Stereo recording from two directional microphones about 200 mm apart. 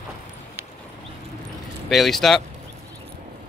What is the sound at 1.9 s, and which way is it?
Speech, centre (ahead or behind).